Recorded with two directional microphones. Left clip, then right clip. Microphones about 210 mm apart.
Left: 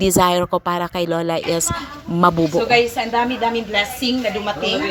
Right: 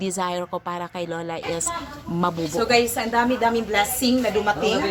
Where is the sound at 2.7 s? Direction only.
15° right (ahead or behind).